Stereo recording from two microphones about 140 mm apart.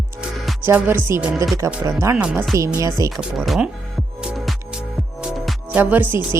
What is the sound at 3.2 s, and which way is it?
Speech, centre (ahead or behind).